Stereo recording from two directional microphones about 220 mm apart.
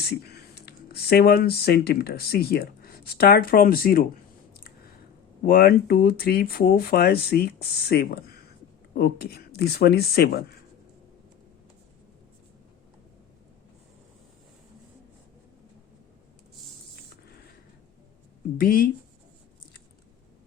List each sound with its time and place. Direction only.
0.6 s speech: 45° left (ahead or behind)
5.4 s speech: 40° left (ahead or behind)
18.5 s speech: 40° left (ahead or behind)